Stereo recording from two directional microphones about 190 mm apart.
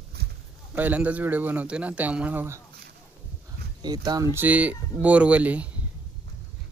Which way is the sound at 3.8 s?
20° right (ahead or behind).